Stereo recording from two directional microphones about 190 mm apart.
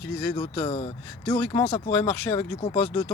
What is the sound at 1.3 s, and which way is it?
Speech, 10° left (ahead or behind).